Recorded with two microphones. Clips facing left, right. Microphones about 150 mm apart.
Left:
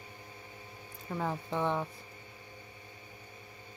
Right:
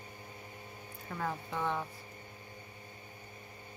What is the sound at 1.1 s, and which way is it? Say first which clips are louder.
Speech: left 3 dB; 20° left (ahead or behind).